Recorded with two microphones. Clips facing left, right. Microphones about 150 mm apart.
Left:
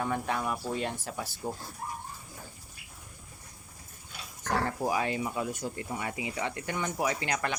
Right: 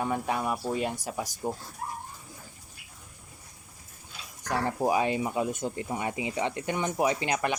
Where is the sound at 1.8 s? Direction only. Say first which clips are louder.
Right 2 dB; 90° right.